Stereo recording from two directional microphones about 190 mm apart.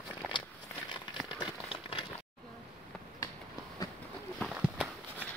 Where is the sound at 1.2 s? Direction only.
25° left (ahead or behind).